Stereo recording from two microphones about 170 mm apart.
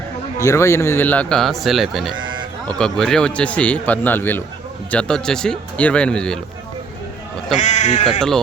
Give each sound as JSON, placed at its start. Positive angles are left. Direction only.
{"t": 0.3, "sound": "speech", "side_deg": 15}
{"t": 2.1, "sound": "sheep", "side_deg": -25}
{"t": 2.6, "sound": "speech", "side_deg": 5}
{"t": 7.6, "sound": "speech", "side_deg": 45}